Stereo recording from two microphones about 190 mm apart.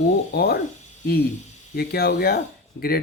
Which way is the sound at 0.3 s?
55° left (ahead or behind).